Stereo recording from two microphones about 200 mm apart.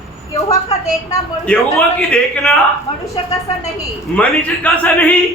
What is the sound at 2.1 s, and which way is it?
Speech, 5° left (ahead or behind).